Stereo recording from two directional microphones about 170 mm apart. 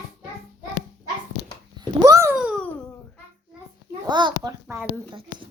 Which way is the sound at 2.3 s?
Centre (ahead or behind).